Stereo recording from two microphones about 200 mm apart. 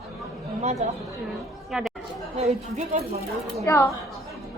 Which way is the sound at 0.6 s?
35° right (ahead or behind).